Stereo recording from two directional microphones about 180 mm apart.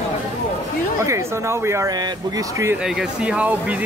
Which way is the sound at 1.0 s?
15° right (ahead or behind).